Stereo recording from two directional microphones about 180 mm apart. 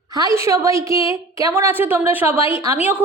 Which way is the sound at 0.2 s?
15° right (ahead or behind).